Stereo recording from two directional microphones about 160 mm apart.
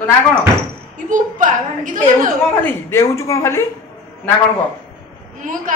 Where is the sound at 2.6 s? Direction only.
15° left (ahead or behind).